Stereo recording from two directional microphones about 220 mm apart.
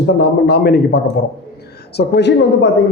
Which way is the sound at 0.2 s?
45° left (ahead or behind).